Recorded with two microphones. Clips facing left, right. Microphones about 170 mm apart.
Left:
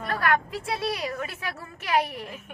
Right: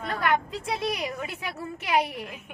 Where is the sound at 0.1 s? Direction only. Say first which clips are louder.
Left 1 dB; 20° right (ahead or behind).